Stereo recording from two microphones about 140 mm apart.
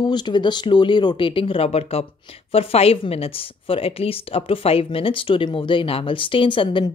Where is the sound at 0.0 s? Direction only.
30° left (ahead or behind).